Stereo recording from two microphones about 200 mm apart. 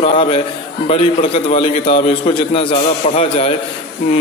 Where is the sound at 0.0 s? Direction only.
30° left (ahead or behind).